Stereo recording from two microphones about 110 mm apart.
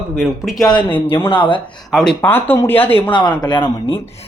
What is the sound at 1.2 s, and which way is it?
Speech, 50° left (ahead or behind).